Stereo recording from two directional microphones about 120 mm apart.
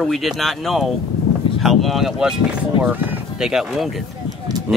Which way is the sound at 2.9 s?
15° right (ahead or behind).